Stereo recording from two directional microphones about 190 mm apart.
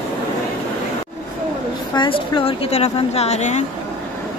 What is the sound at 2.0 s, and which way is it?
Speech, 25° left (ahead or behind).